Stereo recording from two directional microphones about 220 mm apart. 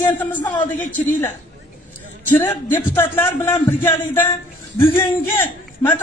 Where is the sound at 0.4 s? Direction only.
20° left (ahead or behind).